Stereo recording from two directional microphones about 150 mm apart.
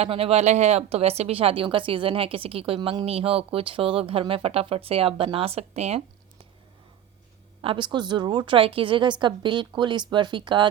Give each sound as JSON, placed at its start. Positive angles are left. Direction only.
{"t": 0.0, "sound": "speech", "side_deg": -40}
{"t": 7.6, "sound": "speech", "side_deg": -35}